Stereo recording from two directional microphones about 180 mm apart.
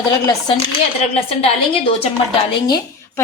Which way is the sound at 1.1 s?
35° left (ahead or behind).